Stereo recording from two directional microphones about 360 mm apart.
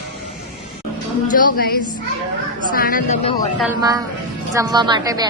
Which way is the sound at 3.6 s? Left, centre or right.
Centre.